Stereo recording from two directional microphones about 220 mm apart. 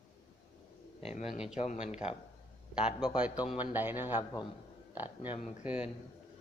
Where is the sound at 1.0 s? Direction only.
25° left (ahead or behind).